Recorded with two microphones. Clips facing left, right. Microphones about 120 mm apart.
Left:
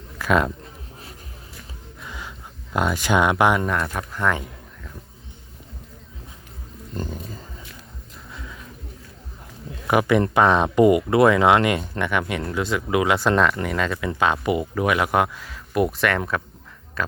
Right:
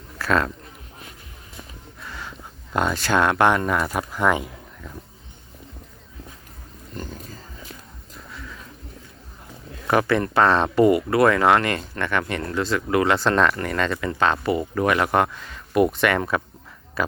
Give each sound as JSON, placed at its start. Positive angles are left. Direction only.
{"t": 0.2, "sound": "speech", "side_deg": 15}
{"t": 2.0, "sound": "music", "side_deg": 15}
{"t": 2.7, "sound": "speech", "side_deg": 10}
{"t": 3.7, "sound": "speech", "side_deg": -5}
{"t": 8.3, "sound": "a sound", "side_deg": 20}
{"t": 9.8, "sound": "speech", "side_deg": 10}